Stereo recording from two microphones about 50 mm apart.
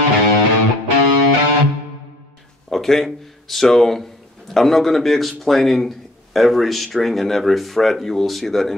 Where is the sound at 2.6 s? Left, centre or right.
Centre.